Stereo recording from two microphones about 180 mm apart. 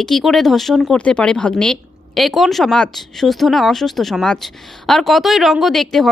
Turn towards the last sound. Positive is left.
turn(degrees=0)  # may be behind; listen again after turning